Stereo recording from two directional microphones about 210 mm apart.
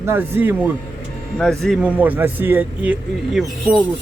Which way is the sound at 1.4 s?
Centre (ahead or behind).